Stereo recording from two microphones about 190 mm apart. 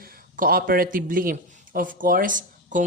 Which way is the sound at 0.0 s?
50° right (ahead or behind).